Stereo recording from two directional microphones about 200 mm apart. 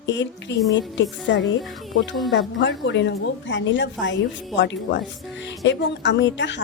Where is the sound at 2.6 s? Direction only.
65° left (ahead or behind).